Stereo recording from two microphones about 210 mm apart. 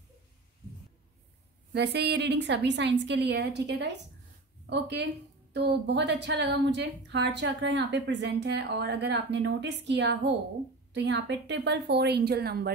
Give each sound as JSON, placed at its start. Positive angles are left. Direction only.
{"t": 1.7, "sound": "a woman's voice", "side_deg": -50}